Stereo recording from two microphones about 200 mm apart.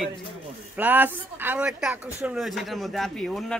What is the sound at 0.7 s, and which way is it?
Speech, 10° right (ahead or behind).